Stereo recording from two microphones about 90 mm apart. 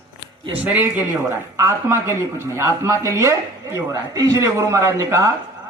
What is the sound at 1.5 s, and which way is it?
Speech, 30° right (ahead or behind).